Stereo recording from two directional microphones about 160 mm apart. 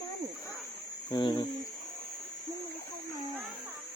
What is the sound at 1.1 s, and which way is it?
Mains hum, 30° left (ahead or behind).